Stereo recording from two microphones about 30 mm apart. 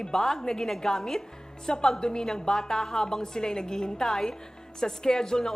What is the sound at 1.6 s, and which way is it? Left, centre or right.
A woman's voice, left.